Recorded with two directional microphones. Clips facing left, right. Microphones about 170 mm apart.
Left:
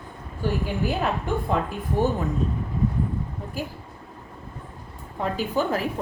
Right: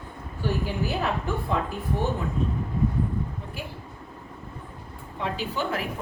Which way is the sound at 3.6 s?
40° left (ahead or behind).